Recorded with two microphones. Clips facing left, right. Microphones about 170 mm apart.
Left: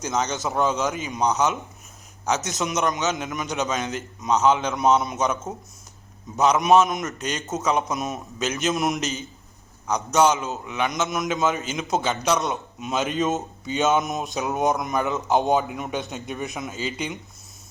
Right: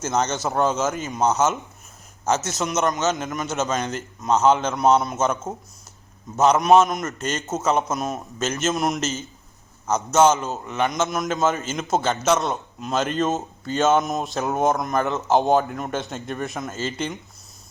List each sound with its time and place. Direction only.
0.4 s a man's voice: centre (ahead or behind)
6.4 s a man's voice: centre (ahead or behind)